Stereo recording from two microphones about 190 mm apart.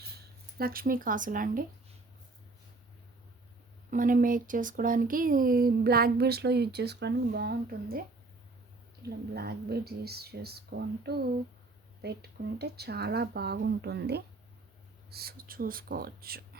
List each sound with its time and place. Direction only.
0.6 s speech: 50° right (ahead or behind)
3.9 s speech: 45° right (ahead or behind)
9.0 s speech: 60° right (ahead or behind)